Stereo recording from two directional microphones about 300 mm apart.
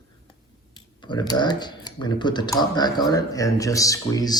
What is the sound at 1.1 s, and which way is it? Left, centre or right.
Speech, centre.